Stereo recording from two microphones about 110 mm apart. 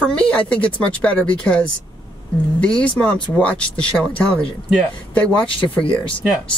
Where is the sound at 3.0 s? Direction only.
15° left (ahead or behind).